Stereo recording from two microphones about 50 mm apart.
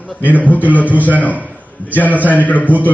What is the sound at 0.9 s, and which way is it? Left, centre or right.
Speech, right.